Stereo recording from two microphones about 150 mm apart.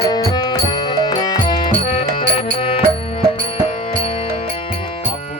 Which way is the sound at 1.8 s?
40° left (ahead or behind).